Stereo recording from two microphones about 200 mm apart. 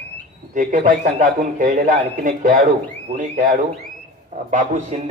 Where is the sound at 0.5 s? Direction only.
40° right (ahead or behind).